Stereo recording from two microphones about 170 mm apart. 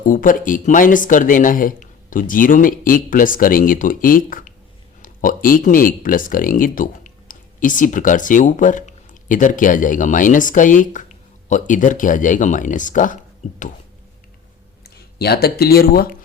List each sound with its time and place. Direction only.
0.0 s speech: 50° left (ahead or behind)
14.8 s speech: 70° left (ahead or behind)